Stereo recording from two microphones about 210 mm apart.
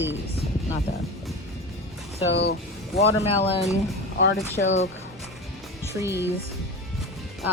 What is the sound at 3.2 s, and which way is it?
Speech, 30° left (ahead or behind).